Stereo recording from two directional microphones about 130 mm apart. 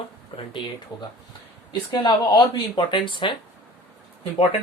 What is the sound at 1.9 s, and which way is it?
Speech, 35° left (ahead or behind).